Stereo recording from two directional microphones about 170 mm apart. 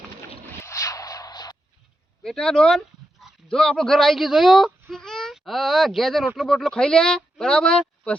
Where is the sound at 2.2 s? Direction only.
5° left (ahead or behind).